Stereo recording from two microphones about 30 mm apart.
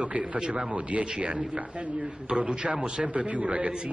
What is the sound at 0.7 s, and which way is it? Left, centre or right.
A man's voice, right.